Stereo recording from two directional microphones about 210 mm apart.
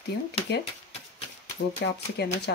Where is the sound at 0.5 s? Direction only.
55° left (ahead or behind).